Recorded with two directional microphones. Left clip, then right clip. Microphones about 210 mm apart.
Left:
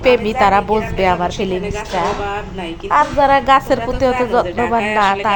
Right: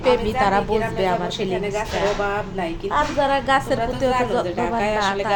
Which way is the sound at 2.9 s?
15° left (ahead or behind).